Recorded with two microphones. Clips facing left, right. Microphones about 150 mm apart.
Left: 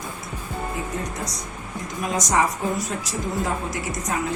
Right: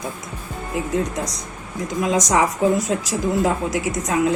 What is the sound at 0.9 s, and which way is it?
A woman's voice, 90° right.